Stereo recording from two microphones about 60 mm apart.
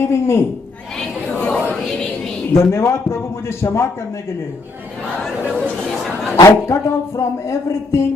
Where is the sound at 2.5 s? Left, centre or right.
Left.